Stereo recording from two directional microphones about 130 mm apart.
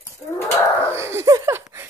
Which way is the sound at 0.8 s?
20° right (ahead or behind).